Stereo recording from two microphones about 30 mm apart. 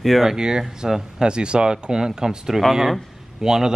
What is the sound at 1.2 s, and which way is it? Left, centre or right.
Speech, right.